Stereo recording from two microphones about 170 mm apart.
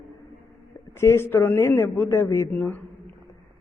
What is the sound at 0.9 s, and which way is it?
Speech, 15° left (ahead or behind).